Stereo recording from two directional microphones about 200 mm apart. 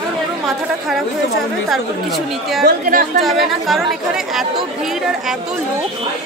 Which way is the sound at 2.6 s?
45° right (ahead or behind).